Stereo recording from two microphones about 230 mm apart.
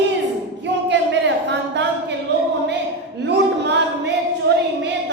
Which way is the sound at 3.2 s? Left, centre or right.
Right.